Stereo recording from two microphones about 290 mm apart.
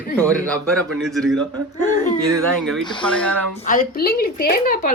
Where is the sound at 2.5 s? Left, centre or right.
Centre.